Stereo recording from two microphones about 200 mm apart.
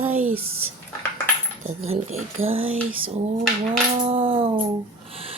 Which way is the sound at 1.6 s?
30° right (ahead or behind).